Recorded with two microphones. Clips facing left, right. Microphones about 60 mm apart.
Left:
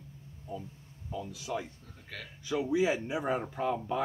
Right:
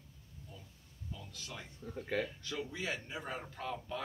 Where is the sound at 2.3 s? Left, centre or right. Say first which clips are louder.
Left 10 dB; centre.